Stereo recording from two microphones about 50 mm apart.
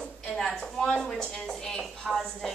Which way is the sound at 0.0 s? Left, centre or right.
Centre.